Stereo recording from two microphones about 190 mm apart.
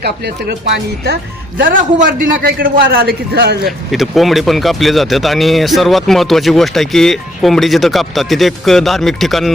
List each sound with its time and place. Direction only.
0.0 s speech: 60° right (ahead or behind)
3.9 s speech: centre (ahead or behind)